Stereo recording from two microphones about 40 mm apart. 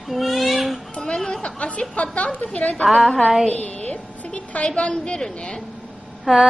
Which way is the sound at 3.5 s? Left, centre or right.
Left.